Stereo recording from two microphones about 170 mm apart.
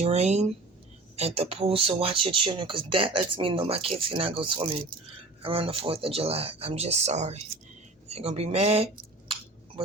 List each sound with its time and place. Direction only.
0.0 s speech: 40° right (ahead or behind)